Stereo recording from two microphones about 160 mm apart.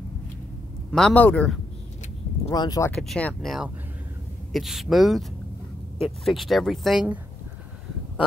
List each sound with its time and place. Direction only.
0.9 s speech: 10° left (ahead or behind)
2.5 s speech: 25° left (ahead or behind)
2.9 s speech: 5° left (ahead or behind)